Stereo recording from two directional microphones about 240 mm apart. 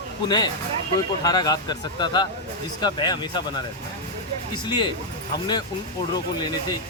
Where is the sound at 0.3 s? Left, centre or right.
Centre.